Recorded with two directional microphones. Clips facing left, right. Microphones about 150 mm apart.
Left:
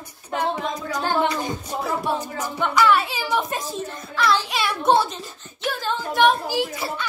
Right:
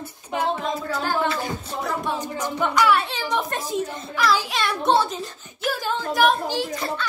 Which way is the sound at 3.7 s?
15° right (ahead or behind).